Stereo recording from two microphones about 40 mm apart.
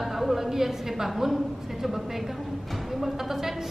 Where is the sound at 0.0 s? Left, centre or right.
Centre.